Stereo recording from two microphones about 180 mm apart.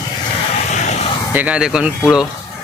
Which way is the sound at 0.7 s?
40° left (ahead or behind).